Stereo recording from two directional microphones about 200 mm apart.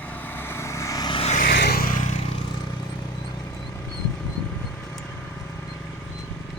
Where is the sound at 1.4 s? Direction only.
50° left (ahead or behind); by 2.3 s 35° left (ahead or behind).